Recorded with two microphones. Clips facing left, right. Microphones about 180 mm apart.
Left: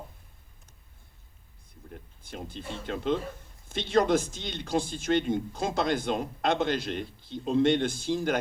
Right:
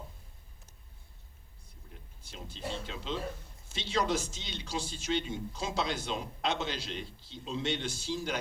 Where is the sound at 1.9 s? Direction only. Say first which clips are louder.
Left 9 dB; 55° left (ahead or behind).